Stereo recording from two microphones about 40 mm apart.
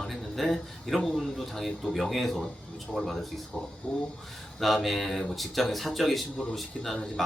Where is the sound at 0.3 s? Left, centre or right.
Centre.